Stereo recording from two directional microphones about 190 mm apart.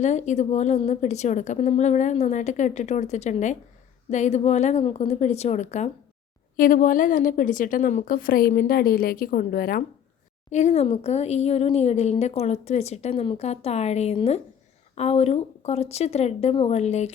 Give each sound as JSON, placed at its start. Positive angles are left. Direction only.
{"t": 0.0, "sound": "a woman's voice", "side_deg": 40}
{"t": 10.5, "sound": "speech", "side_deg": 35}